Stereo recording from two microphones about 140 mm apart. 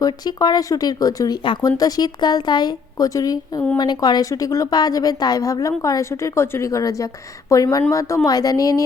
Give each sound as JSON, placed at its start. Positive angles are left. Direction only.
{"t": 0.0, "sound": "speech", "side_deg": 25}